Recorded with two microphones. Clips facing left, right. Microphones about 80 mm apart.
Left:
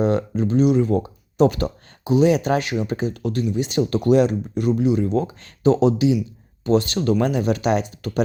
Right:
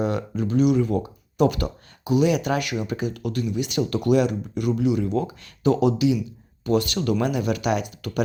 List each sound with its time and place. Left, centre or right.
0.0 s speech: left